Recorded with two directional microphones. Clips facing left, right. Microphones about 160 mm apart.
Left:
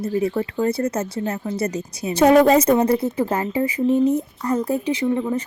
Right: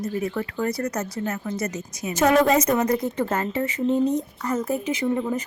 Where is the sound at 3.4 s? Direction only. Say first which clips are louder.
Left 4 dB; 15° left (ahead or behind).